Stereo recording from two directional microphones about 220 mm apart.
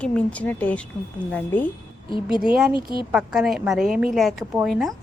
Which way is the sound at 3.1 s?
5° right (ahead or behind).